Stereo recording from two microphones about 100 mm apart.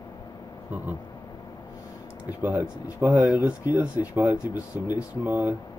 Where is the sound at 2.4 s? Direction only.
15° right (ahead or behind).